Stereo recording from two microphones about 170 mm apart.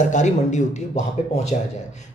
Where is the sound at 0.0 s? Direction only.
45° left (ahead or behind).